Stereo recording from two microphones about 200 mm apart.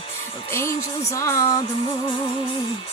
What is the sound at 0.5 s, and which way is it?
Speech, 15° left (ahead or behind).